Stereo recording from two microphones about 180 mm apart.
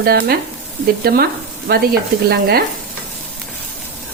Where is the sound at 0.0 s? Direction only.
60° right (ahead or behind).